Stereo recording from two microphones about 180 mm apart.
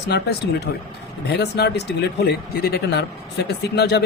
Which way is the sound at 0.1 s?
65° left (ahead or behind).